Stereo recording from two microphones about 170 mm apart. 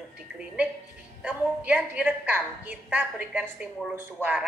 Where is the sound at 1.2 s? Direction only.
5° right (ahead or behind).